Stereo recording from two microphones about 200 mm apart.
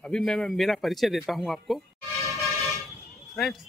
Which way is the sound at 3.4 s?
Centre (ahead or behind).